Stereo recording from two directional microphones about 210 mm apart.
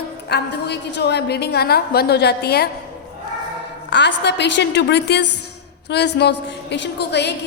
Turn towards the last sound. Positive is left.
turn(degrees=55)  # may be behind; listen again after turning